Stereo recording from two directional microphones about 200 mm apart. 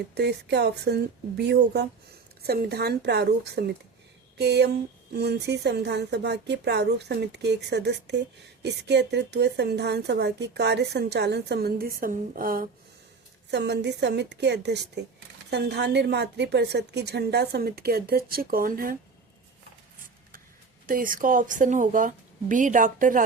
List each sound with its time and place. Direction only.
0.1 s a woman's voice: 55° right (ahead or behind)
13.5 s a woman's voice: 60° right (ahead or behind)
20.8 s a woman's voice: 45° right (ahead or behind)